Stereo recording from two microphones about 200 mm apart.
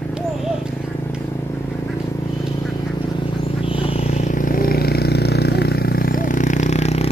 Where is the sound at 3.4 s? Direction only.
25° left (ahead or behind).